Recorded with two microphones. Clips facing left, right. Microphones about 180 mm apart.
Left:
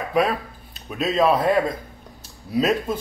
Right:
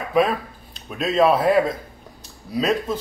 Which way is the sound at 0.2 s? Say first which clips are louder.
Right 2 dB; centre (ahead or behind).